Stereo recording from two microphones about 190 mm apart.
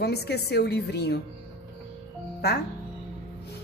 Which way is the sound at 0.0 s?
60° left (ahead or behind).